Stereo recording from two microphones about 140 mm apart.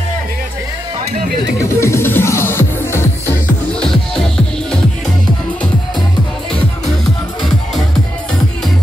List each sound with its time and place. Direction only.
1.7 s music: 20° left (ahead or behind)
3.8 s music: 5° left (ahead or behind)